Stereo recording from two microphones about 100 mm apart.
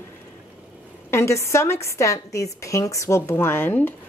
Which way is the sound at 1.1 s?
30° left (ahead or behind).